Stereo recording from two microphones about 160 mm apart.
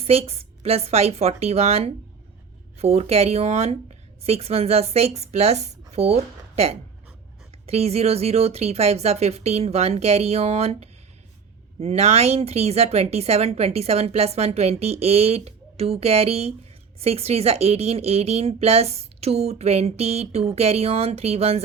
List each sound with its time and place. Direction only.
0.0 s a woman's voice: 40° right (ahead or behind)
7.7 s a woman's voice: 40° right (ahead or behind)